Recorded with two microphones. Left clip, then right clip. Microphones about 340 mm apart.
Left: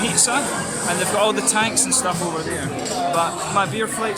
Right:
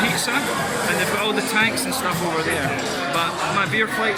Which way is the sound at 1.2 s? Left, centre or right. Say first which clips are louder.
Left 1 dB; centre.